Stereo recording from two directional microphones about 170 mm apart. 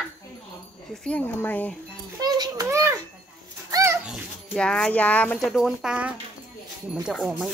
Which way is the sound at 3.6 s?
20° right (ahead or behind).